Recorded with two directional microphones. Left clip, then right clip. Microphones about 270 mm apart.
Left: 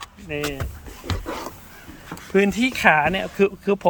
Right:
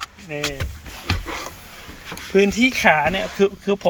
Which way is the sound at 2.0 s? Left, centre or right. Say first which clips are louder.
Right 3 dB; centre.